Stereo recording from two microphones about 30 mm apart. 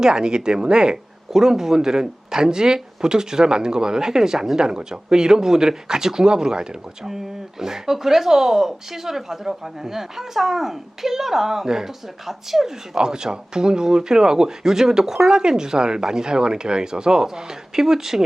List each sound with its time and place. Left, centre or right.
0.0 s speech: right
1.3 s speech: centre
7.6 s speech: centre
12.2 s speech: centre
13.0 s speech: right